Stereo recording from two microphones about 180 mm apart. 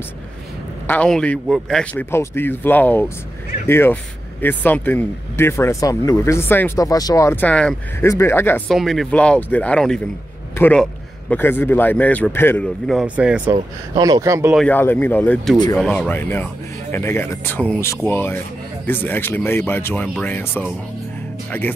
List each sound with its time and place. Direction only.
0.8 s speech: 5° left (ahead or behind)
8.6 s speech: centre (ahead or behind)
12.8 s speech: 5° right (ahead or behind)
13.5 s speech: 20° right (ahead or behind)
14.7 s speech: 10° left (ahead or behind)
21.5 s speech: 10° left (ahead or behind)